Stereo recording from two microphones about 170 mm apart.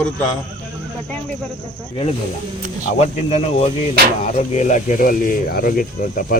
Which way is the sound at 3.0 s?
40° left (ahead or behind).